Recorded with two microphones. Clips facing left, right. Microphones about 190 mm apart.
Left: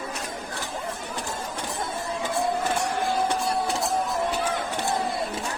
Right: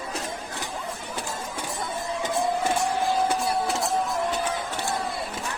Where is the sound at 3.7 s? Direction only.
Centre (ahead or behind).